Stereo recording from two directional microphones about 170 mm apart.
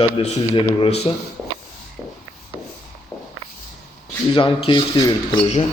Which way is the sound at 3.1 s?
5° left (ahead or behind).